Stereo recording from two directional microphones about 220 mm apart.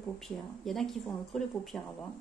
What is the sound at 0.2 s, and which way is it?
Speech, centre (ahead or behind).